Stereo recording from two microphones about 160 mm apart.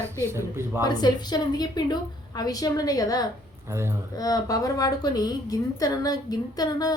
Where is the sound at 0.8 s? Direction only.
25° left (ahead or behind).